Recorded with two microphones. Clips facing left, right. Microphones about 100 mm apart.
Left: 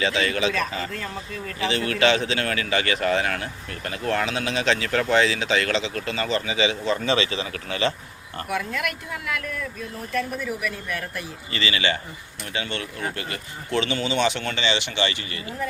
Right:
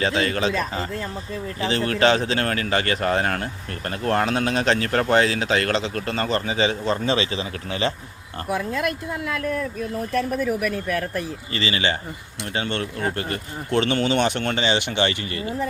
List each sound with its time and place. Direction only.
0.0 s speech: 35° right (ahead or behind)